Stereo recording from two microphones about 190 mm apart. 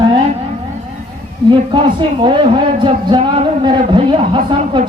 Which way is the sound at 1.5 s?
25° right (ahead or behind).